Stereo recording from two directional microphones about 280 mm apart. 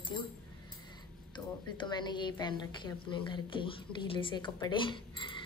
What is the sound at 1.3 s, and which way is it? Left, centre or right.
A woman's voice, centre.